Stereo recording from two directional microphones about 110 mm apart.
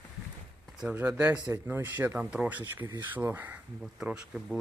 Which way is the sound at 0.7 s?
10° right (ahead or behind).